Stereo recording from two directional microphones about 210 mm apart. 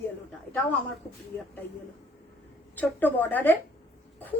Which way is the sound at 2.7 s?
10° left (ahead or behind).